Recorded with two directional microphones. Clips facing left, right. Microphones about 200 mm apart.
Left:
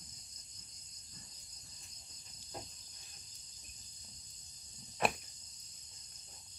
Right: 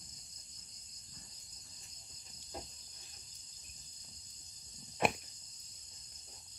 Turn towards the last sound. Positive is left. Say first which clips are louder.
# right 1 dB
turn(degrees=-20)  # may be behind; listen again after turning